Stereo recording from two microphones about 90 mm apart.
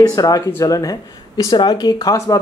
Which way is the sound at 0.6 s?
40° left (ahead or behind).